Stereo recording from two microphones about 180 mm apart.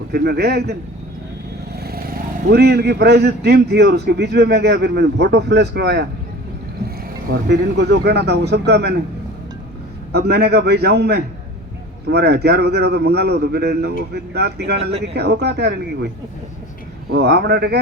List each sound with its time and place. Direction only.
0.1 s a man's voice: 60° right (ahead or behind)
7.3 s speech: 70° right (ahead or behind)
10.1 s a man's voice: 65° right (ahead or behind)
17.1 s a man's voice: 65° right (ahead or behind)